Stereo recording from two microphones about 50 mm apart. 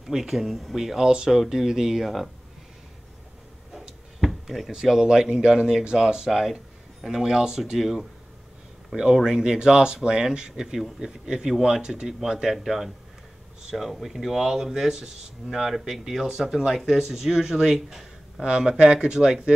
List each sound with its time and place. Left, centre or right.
0.0 s speech: centre
4.2 s speech: centre
9.1 s speech: centre